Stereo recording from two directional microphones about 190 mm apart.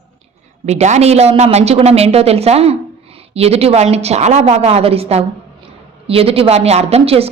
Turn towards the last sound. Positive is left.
turn(degrees=-30)  # may be behind; listen again after turning